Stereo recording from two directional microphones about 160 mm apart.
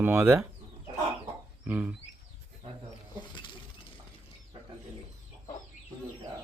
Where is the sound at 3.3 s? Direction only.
30° left (ahead or behind).